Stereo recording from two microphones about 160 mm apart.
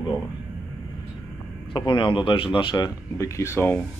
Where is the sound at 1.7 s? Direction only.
30° left (ahead or behind).